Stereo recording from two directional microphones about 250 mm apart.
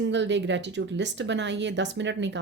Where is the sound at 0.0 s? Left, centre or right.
Right.